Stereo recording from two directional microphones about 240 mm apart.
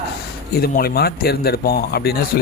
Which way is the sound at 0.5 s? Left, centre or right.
Left.